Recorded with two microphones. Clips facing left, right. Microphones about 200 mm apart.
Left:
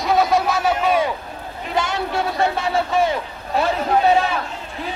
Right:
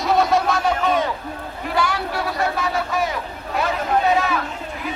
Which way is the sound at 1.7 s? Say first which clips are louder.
Left 1 dB; 25° left (ahead or behind).